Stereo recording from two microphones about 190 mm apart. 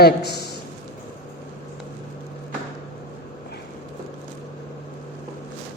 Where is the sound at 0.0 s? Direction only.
60° left (ahead or behind).